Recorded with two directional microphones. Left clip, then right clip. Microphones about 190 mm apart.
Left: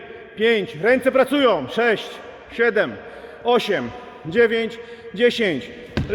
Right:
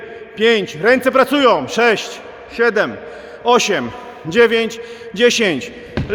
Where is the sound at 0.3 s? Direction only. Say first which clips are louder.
Right 5 dB; 10° right (ahead or behind).